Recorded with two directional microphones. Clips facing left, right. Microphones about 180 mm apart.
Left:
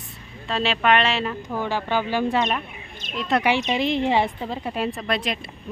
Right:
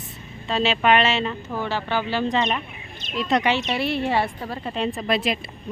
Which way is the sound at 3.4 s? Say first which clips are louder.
Left 1 dB; 15° left (ahead or behind).